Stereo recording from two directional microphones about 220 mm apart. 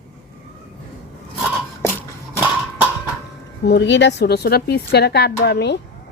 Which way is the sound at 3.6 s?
50° left (ahead or behind).